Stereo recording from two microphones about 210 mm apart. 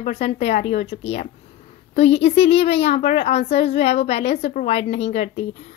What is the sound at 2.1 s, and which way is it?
A woman's voice, 30° left (ahead or behind).